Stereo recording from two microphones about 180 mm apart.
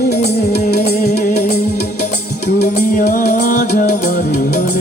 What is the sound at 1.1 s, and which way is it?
Music, 50° left (ahead or behind).